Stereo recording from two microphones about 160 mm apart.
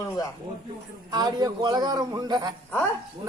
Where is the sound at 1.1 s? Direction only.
25° right (ahead or behind).